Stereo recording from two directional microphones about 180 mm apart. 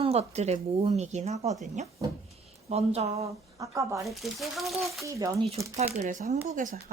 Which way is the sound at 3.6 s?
15° right (ahead or behind).